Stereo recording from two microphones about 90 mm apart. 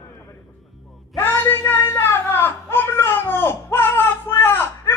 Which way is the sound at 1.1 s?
25° left (ahead or behind).